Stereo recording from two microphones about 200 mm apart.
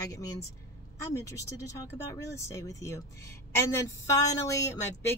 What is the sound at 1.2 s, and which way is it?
Speech, 15° left (ahead or behind).